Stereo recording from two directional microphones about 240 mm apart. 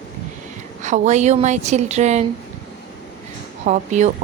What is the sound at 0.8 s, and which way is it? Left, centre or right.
A woman's voice, right.